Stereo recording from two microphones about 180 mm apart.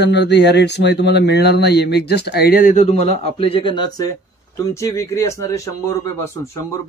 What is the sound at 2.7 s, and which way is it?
Speech, 40° left (ahead or behind).